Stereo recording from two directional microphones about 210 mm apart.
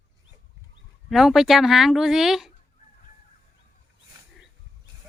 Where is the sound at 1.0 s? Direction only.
Centre (ahead or behind).